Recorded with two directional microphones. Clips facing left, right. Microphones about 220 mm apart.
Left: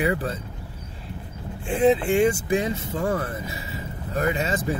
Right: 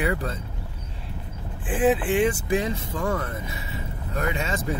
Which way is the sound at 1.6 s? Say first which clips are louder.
Left 2 dB; 5° right (ahead or behind).